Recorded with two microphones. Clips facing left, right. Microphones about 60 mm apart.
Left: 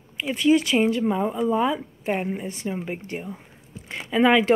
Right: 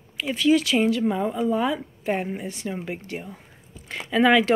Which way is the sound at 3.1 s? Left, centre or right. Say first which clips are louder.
Left 2 dB; left.